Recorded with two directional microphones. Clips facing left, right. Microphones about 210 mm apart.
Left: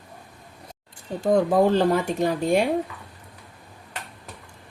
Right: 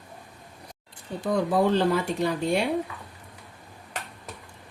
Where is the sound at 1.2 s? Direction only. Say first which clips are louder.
Left 4 dB; 45° left (ahead or behind).